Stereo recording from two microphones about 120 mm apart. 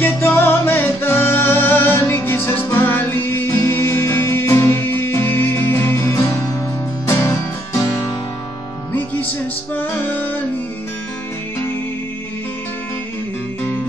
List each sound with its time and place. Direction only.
0.0 s music: 15° left (ahead or behind)
8.9 s music: 15° left (ahead or behind)